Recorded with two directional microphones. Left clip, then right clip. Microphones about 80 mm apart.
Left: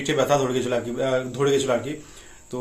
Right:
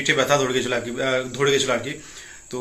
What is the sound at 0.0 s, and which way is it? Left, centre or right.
Speech, left.